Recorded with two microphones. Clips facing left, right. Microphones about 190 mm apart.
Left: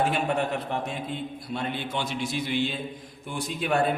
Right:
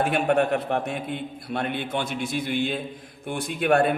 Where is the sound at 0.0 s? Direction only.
60° right (ahead or behind).